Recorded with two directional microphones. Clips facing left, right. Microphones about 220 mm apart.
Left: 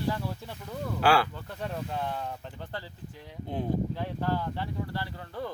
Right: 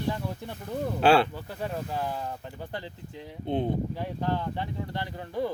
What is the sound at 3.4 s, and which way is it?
Speech, 25° right (ahead or behind).